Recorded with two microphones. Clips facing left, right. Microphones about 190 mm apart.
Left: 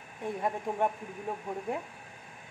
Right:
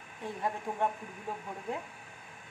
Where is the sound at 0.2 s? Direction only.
15° left (ahead or behind).